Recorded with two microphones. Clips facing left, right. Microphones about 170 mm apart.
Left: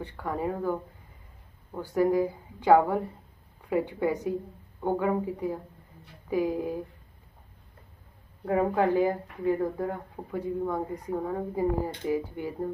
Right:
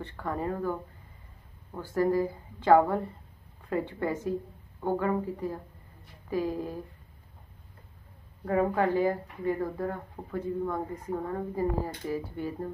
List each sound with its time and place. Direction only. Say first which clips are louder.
0.0 s speech: left 2 dB; 10° left (ahead or behind)
8.5 s speech: left 1 dB; 15° left (ahead or behind)